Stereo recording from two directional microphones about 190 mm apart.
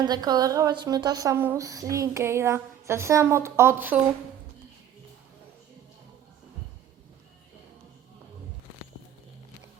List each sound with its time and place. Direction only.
0.0 s a woman's voice: 20° right (ahead or behind)